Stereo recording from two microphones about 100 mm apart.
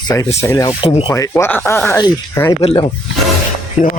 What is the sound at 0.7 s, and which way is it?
Speech, 70° left (ahead or behind).